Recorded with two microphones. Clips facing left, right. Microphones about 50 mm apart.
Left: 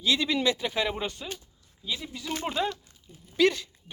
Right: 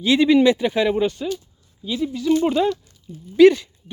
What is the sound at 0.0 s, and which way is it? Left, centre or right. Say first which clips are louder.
Speech: right 9 dB; right.